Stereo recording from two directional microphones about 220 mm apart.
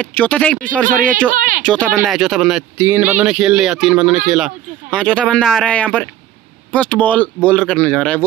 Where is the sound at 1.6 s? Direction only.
5° left (ahead or behind).